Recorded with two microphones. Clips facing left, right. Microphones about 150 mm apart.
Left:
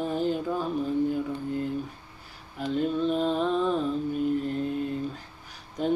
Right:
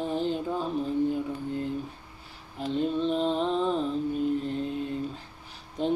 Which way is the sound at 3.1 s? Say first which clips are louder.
Left 1 dB; 25° right (ahead or behind).